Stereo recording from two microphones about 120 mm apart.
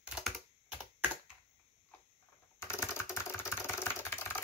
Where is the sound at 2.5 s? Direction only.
20° left (ahead or behind).